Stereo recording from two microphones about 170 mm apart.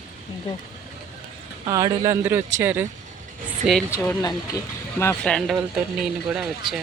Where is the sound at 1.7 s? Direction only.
20° right (ahead or behind); by 4.0 s centre (ahead or behind).